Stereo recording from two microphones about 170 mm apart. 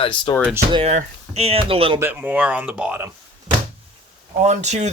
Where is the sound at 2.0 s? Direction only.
10° right (ahead or behind).